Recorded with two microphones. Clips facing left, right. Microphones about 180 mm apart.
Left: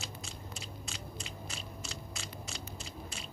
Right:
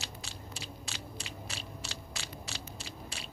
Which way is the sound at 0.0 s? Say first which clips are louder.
Even; 70° right (ahead or behind).